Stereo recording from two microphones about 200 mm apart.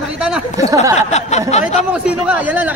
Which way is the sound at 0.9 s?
35° left (ahead or behind).